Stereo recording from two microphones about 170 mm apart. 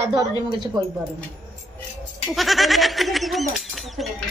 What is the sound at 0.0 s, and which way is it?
Speech, 30° right (ahead or behind).